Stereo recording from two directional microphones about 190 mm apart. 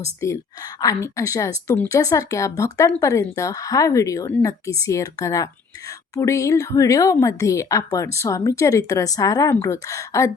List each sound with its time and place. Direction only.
0.0 s speech: 15° left (ahead or behind)